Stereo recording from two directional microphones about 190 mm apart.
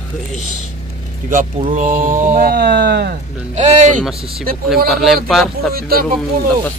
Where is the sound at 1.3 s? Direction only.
45° right (ahead or behind); by 3.2 s 60° right (ahead or behind).